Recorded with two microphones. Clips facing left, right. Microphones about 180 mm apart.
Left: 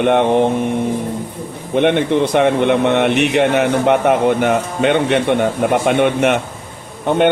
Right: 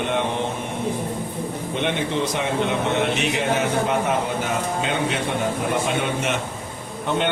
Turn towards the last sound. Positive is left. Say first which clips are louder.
# left 9 dB
turn(degrees=55)  # may be behind; listen again after turning